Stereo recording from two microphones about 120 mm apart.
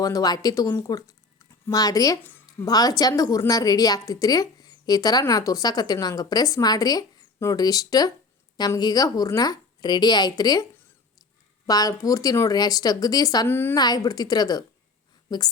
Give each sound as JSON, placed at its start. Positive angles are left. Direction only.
{"t": 0.0, "sound": "a woman's voice", "side_deg": 30}
{"t": 2.2, "sound": "a sound", "side_deg": 15}
{"t": 2.6, "sound": "a woman's voice", "side_deg": 30}
{"t": 13.5, "sound": "a woman's voice", "side_deg": 20}
{"t": 13.7, "sound": "a woman's voice", "side_deg": 35}